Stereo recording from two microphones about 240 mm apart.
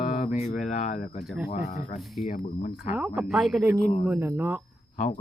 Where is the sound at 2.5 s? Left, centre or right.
Left.